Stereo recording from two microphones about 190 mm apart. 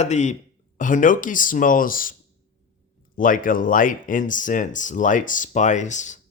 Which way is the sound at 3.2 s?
45° left (ahead or behind).